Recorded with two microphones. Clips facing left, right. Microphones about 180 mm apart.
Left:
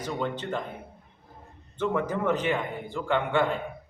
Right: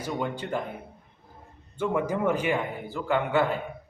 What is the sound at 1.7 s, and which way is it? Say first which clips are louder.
A man's voice: right 1 dB; 10° right (ahead or behind).